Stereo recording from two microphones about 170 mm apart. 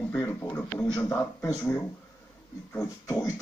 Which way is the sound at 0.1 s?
10° left (ahead or behind).